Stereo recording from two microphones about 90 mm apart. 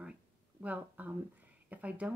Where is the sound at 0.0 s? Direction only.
15° right (ahead or behind).